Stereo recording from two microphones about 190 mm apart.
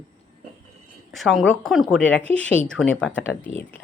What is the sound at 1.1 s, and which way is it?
Speech, centre (ahead or behind).